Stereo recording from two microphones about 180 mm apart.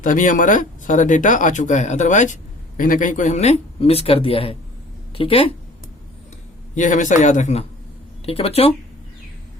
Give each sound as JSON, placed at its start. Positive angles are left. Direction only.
{"t": 0.0, "sound": "speech", "side_deg": 45}
{"t": 6.7, "sound": "speech", "side_deg": 45}